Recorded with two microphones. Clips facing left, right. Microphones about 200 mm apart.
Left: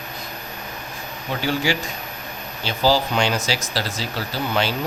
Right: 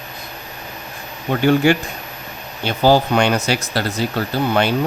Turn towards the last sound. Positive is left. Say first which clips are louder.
# right 6 dB
turn(degrees=-55)  # may be behind; listen again after turning